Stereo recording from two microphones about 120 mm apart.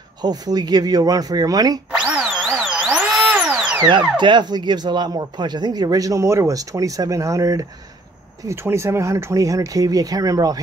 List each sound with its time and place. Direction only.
0.2 s speech: 35° right (ahead or behind)
2.0 s tools: 5° right (ahead or behind)
4.2 s speech: 40° right (ahead or behind)